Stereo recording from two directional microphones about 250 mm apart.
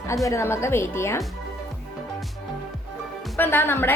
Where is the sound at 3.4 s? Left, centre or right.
Centre.